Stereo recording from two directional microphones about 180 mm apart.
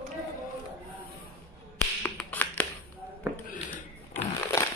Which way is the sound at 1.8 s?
5° left (ahead or behind).